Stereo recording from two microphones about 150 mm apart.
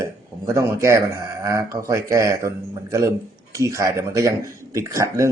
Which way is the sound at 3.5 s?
20° right (ahead or behind).